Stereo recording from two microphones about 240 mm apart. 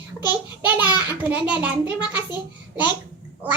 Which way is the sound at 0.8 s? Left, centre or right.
Centre.